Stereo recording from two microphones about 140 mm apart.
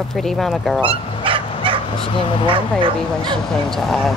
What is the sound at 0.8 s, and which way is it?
Dog, 40° right (ahead or behind).